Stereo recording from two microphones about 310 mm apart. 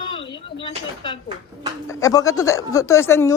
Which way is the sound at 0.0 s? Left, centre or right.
Centre.